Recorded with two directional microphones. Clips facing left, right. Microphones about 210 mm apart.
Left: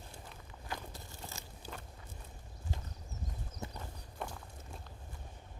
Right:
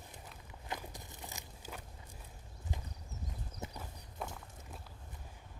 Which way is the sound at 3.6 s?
20° right (ahead or behind).